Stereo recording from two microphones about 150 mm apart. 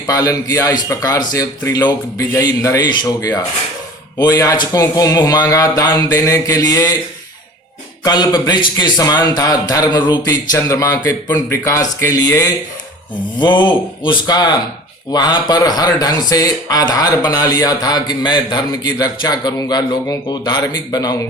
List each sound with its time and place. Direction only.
0.1 s speech: 25° left (ahead or behind)
8.0 s speech: 25° left (ahead or behind)